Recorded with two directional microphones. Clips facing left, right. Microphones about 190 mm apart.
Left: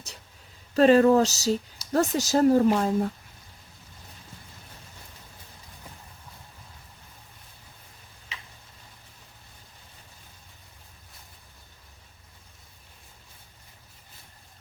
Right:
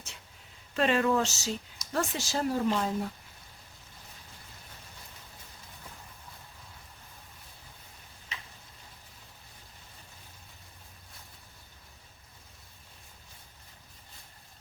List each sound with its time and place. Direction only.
0.7 s speech: 40° left (ahead or behind)